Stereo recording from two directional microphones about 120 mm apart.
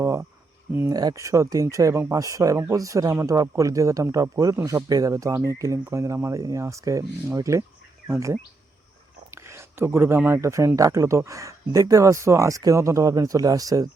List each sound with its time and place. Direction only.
0.0 s a sound: 25° right (ahead or behind)
0.7 s speech: 20° right (ahead or behind)
0.9 s speech: 30° right (ahead or behind)